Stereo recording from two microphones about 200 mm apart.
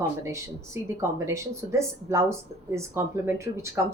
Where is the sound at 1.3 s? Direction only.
15° right (ahead or behind).